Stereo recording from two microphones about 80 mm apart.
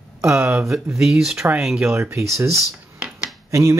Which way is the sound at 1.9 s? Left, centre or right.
Right.